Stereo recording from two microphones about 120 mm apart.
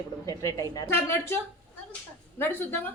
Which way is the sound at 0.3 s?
30° left (ahead or behind).